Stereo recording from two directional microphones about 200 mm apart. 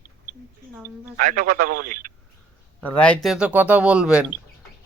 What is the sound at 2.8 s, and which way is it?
Speech, 5° left (ahead or behind).